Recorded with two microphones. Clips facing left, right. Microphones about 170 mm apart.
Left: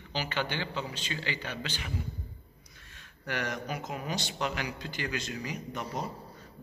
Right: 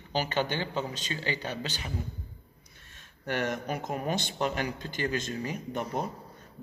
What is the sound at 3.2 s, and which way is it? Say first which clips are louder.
A man's voice: right 4 dB; 50° right (ahead or behind).